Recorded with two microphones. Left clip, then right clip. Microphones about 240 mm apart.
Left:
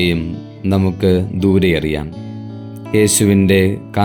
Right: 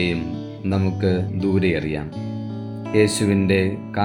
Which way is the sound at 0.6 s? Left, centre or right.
Left.